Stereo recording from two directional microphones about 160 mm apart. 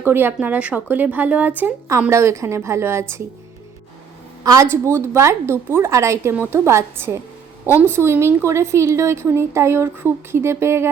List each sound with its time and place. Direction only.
0.0 s a woman's voice: 15° right (ahead or behind)
4.4 s a woman's voice: 20° right (ahead or behind)